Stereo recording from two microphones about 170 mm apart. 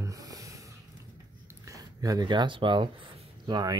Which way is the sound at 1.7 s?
20° right (ahead or behind).